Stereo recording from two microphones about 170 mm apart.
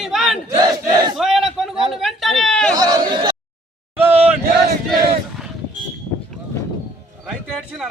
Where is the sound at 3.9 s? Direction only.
10° right (ahead or behind).